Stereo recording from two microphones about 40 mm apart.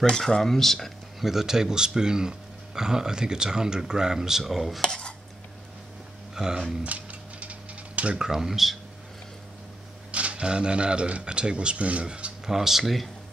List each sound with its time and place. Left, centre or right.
0.1 s speech: centre
1.2 s speech: centre
4.8 s cutlery: left
6.3 s speech: centre
6.8 s mechanisms: right
8.2 s speech: centre
10.1 s speech: right
12.4 s speech: centre